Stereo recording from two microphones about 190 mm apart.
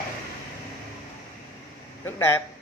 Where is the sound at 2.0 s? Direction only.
15° left (ahead or behind).